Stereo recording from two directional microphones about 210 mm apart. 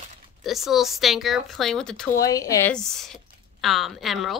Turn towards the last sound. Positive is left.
turn(degrees=0)  # may be behind; listen again after turning